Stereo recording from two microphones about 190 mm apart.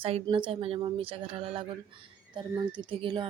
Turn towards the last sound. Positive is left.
turn(degrees=-25)  # may be behind; listen again after turning